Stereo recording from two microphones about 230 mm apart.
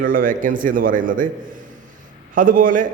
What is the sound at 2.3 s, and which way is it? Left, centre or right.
Speech, right.